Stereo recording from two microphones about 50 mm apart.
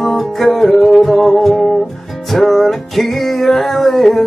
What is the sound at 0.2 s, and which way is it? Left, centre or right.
Music, centre.